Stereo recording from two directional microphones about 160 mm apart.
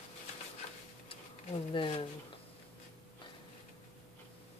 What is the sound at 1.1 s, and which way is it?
Insect, 35° left (ahead or behind).